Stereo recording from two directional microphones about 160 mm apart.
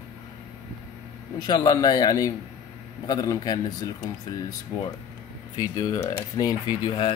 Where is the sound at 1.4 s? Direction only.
25° left (ahead or behind).